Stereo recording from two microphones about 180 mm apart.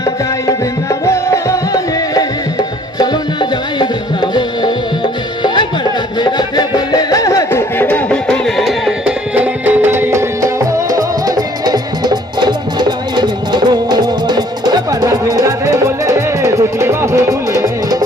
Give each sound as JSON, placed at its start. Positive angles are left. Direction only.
{"t": 0.0, "sound": "music", "side_deg": 20}